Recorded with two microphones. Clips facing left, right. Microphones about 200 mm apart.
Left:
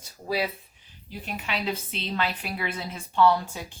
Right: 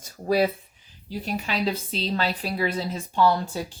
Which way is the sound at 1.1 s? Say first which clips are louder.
Right 5 dB; 35° right (ahead or behind).